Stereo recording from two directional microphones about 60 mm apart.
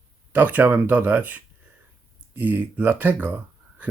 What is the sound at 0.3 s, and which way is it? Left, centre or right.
Speech, right.